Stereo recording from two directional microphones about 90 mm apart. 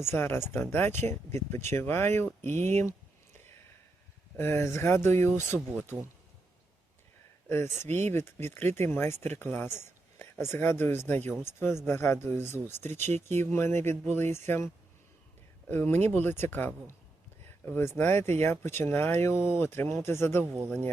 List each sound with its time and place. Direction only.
0.0 s speech: 25° left (ahead or behind)
4.4 s speech: 30° left (ahead or behind)
7.4 s speech: 30° left (ahead or behind)
15.7 s speech: 25° left (ahead or behind)